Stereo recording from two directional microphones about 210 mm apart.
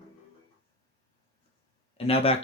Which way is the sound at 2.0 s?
25° left (ahead or behind).